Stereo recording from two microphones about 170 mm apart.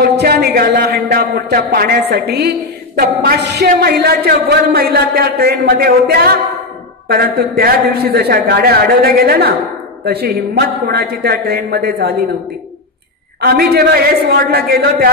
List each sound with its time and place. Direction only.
0.2 s a man's voice: 70° right (ahead or behind)
13.4 s a man's voice: 65° right (ahead or behind)